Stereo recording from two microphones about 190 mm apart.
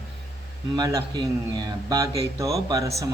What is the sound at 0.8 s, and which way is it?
Speech, 20° right (ahead or behind).